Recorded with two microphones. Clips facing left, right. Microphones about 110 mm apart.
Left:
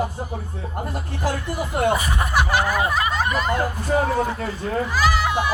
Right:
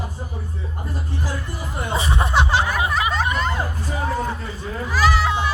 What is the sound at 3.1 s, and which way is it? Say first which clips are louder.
Speech: even; centre (ahead or behind).